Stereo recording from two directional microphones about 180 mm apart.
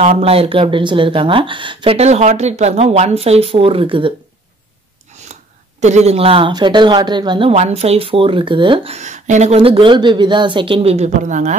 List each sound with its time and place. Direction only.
0.2 s speech: 30° right (ahead or behind)
5.3 s speech: 40° right (ahead or behind)